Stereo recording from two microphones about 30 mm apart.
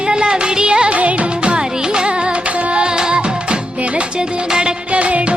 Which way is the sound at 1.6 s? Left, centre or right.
Right.